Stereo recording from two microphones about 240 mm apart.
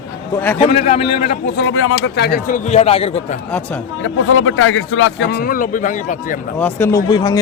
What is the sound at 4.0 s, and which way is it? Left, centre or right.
Speech, left.